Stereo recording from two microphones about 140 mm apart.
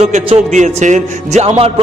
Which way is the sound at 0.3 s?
55° right (ahead or behind).